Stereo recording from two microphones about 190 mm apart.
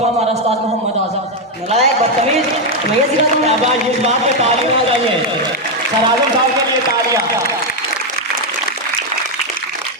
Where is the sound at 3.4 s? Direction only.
35° right (ahead or behind).